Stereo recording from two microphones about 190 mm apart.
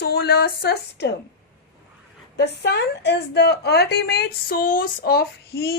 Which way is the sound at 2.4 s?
60° left (ahead or behind).